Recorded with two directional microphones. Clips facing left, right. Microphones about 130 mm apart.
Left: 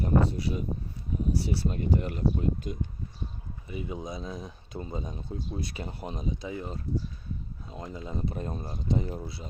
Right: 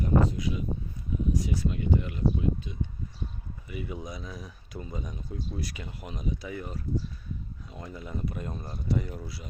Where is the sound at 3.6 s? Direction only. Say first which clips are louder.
Left 2 dB; 25° left (ahead or behind).